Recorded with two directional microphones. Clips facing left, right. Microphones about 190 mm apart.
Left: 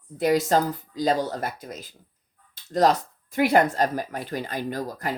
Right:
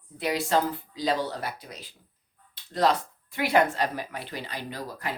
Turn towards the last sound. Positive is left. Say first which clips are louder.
# left 5 dB
turn(degrees=45)  # may be behind; listen again after turning